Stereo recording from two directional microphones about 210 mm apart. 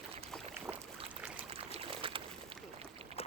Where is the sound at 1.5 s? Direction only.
25° right (ahead or behind).